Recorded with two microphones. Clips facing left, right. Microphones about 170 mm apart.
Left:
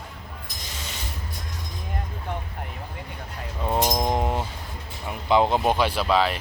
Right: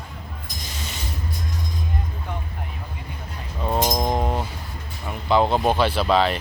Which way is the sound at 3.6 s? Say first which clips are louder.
Right 1 dB; 10° right (ahead or behind).